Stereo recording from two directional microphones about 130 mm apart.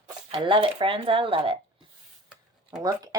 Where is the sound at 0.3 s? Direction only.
40° right (ahead or behind).